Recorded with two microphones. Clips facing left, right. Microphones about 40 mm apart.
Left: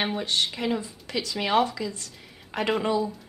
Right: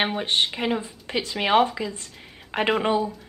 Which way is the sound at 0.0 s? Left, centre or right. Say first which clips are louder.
Right 3 dB; right.